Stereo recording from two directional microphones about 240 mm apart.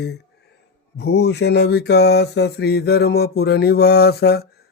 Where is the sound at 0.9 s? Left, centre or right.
Left.